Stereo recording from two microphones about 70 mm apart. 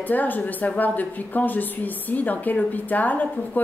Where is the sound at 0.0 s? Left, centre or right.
Left.